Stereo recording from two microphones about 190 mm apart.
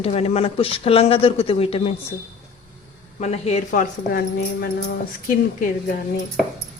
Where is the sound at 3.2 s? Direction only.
35° left (ahead or behind); by 4.7 s 50° left (ahead or behind).